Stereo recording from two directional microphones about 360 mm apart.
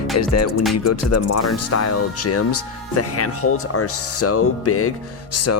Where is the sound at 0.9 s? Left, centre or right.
Left.